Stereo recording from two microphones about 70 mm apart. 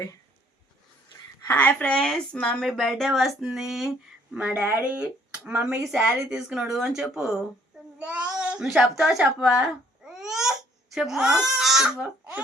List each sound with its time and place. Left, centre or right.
1.5 s a woman's voice: left
2.6 s speech: centre
4.5 s speech: right
4.8 s speech: centre
7.9 s child singing: centre
8.6 s speech: centre
10.1 s a sound: centre
10.9 s speech: centre